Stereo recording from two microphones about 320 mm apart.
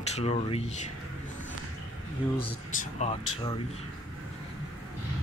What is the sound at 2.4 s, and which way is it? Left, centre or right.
Speech, centre.